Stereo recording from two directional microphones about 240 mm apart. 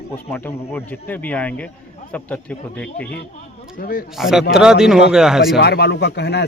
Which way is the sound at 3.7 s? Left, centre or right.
Left.